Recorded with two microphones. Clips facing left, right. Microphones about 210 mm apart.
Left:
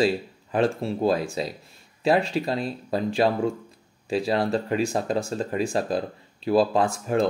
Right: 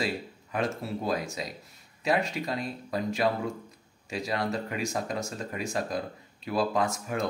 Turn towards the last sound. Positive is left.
turn(degrees=30)  # may be behind; listen again after turning